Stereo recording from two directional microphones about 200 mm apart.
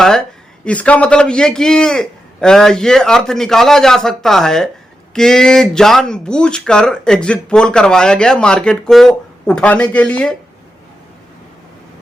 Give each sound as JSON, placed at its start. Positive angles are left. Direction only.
{"t": 0.0, "sound": "speech", "side_deg": 5}